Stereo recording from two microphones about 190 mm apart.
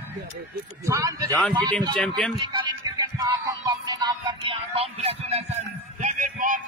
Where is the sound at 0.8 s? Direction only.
15° right (ahead or behind).